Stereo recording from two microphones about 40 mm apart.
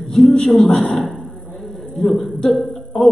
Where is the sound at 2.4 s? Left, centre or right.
Centre.